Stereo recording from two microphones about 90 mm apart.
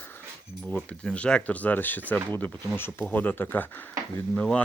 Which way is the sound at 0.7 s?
15° left (ahead or behind).